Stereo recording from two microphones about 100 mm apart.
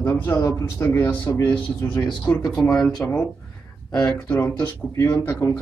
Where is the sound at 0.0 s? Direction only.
20° left (ahead or behind).